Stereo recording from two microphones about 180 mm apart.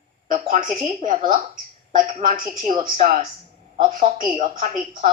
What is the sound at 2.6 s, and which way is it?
Speech, 25° right (ahead or behind).